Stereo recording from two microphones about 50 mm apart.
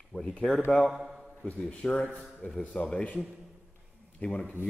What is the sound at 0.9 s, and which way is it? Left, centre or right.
Speech, centre.